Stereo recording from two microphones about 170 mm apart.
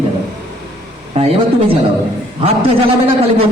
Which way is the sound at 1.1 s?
35° right (ahead or behind).